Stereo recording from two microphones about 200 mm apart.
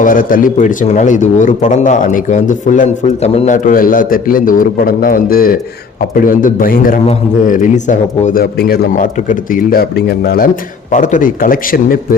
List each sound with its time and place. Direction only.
0.0 s a man's voice: 45° left (ahead or behind)